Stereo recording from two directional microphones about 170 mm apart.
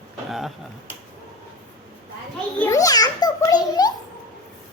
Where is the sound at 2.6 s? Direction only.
20° left (ahead or behind).